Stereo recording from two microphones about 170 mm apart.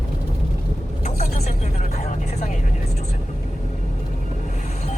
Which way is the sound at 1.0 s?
40° left (ahead or behind).